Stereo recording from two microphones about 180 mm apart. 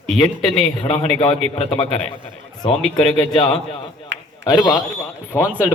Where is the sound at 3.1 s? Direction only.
30° left (ahead or behind).